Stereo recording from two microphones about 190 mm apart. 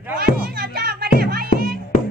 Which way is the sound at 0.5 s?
55° right (ahead or behind).